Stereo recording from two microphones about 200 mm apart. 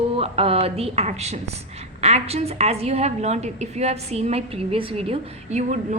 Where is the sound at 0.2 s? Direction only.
30° right (ahead or behind).